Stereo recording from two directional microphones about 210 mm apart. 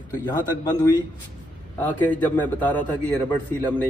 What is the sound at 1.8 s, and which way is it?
A man's voice, 10° left (ahead or behind).